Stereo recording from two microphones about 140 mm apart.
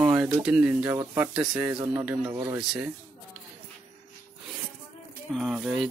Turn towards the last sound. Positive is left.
turn(degrees=-5)  # may be behind; listen again after turning